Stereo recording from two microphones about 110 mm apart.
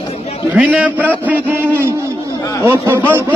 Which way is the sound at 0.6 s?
15° right (ahead or behind).